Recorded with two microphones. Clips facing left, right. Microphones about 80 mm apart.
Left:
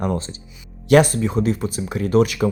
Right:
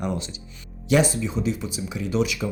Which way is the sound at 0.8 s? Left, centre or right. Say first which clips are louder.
Left 6 dB; left.